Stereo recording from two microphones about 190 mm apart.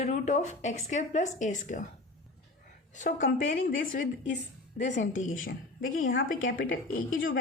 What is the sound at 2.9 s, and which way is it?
Speech, 40° left (ahead or behind).